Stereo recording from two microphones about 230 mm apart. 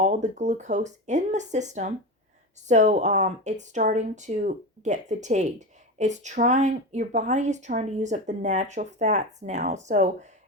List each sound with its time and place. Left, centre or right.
0.0 s speech: right